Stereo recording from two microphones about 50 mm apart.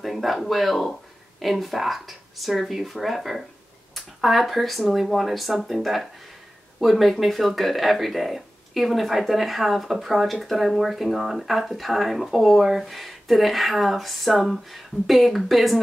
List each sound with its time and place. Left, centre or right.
0.0 s speech: centre